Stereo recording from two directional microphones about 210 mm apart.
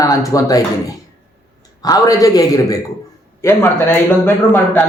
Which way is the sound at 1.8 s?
15° left (ahead or behind).